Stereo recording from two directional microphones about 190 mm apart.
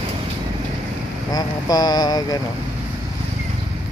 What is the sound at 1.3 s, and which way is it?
Speech, 20° left (ahead or behind).